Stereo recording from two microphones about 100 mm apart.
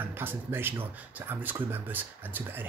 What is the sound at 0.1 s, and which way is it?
Speech, 20° right (ahead or behind).